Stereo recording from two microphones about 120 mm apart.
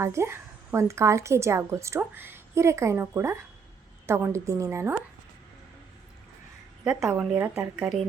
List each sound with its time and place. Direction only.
0.0 s a woman's voice: 20° right (ahead or behind)
6.8 s a woman's voice: 10° right (ahead or behind)
7.8 s speech: centre (ahead or behind)